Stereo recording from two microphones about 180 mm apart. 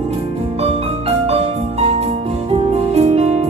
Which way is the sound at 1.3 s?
35° right (ahead or behind).